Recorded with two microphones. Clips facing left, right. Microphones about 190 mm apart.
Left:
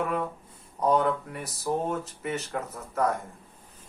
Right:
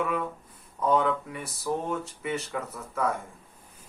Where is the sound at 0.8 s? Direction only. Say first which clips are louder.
Left 1 dB; 35° left (ahead or behind).